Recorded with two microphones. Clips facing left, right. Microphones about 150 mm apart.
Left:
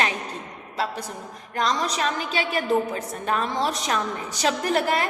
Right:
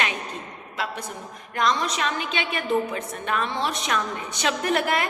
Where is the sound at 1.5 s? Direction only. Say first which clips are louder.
Even; 35° left (ahead or behind).